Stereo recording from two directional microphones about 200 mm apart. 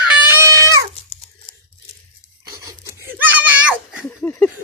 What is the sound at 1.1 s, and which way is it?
Dog, 30° left (ahead or behind).